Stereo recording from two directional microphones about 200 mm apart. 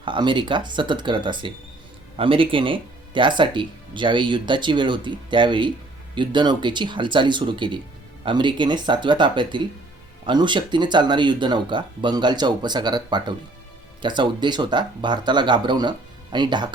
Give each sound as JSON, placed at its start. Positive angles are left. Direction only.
{"t": 0.0, "sound": "speech", "side_deg": -25}